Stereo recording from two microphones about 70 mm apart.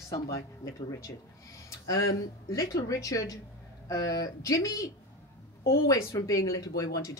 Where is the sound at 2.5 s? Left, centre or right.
Left.